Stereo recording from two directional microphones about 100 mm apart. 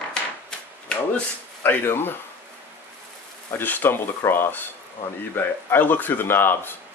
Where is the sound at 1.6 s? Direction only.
20° left (ahead or behind).